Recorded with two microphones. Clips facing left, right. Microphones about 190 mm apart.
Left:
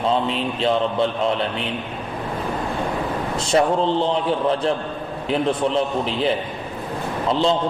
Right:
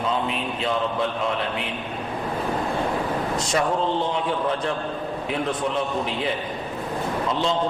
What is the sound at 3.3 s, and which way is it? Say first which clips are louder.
Speech: left 7 dB; 30° left (ahead or behind).